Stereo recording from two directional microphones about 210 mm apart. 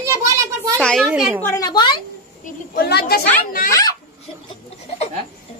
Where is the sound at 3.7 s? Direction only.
15° left (ahead or behind).